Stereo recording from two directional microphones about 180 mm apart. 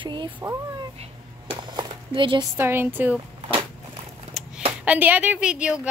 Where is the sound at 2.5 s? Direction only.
15° right (ahead or behind).